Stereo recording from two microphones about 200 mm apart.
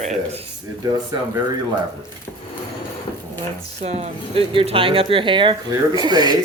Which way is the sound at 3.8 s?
30° right (ahead or behind).